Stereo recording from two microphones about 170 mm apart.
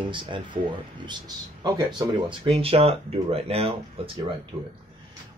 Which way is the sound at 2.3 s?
35° right (ahead or behind).